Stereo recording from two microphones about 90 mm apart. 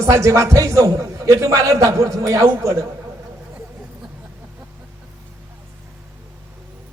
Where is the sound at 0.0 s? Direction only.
35° right (ahead or behind).